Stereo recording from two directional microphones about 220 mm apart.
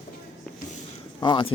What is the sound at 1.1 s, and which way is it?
Speech, 20° left (ahead or behind).